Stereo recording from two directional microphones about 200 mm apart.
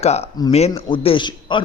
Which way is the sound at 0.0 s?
30° left (ahead or behind).